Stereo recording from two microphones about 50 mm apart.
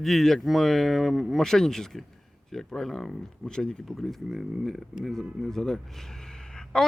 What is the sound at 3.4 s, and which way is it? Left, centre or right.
Speech, centre.